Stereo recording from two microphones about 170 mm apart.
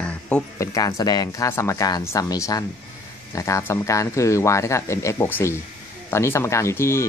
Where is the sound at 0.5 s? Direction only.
20° left (ahead or behind).